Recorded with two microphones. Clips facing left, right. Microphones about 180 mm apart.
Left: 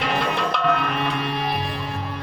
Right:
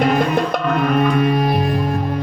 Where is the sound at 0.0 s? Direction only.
45° right (ahead or behind).